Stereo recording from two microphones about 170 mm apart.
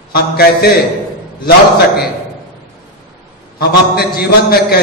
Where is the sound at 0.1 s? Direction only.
65° left (ahead or behind).